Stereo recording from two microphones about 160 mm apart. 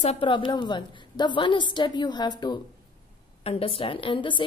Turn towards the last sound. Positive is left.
turn(degrees=30)  # may be behind; listen again after turning